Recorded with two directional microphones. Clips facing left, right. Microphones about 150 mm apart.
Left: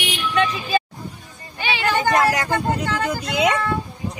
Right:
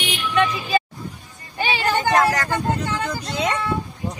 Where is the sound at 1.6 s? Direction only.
40° right (ahead or behind).